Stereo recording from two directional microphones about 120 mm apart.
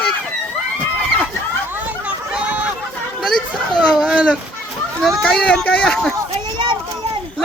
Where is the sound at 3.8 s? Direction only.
10° right (ahead or behind).